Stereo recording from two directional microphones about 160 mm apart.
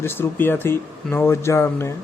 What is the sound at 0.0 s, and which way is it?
Speech, 15° left (ahead or behind).